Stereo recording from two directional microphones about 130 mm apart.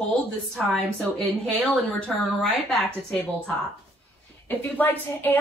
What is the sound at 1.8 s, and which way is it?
Speech, 15° left (ahead or behind).